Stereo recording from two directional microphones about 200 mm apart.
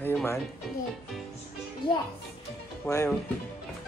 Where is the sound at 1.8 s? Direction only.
25° left (ahead or behind).